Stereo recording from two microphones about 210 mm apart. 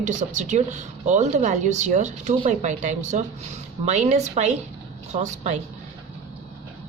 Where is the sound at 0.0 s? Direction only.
35° right (ahead or behind).